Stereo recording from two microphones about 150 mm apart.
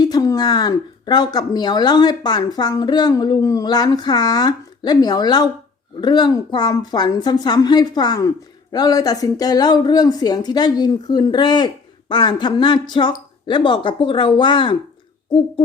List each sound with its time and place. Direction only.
0.0 s speech: 25° left (ahead or behind)